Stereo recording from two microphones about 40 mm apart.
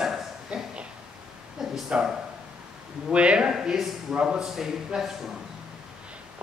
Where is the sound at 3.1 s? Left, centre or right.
Right.